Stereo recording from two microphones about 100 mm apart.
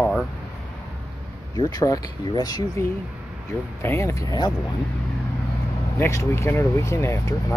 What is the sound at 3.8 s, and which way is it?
Speech, 25° left (ahead or behind).